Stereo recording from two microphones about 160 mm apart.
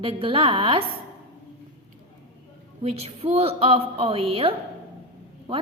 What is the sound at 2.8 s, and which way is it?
Speech, 40° right (ahead or behind).